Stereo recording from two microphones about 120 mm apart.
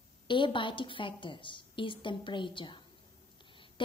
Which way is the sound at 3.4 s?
45° left (ahead or behind).